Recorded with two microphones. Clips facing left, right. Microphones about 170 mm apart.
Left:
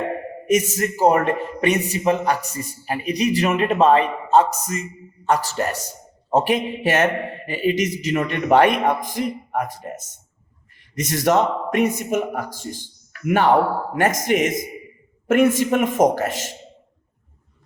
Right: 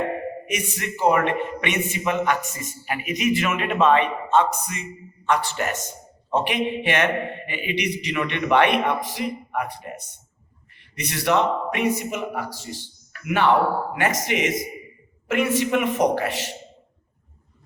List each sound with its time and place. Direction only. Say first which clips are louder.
0.5 s a man's voice: left 13 dB; 40° left (ahead or behind)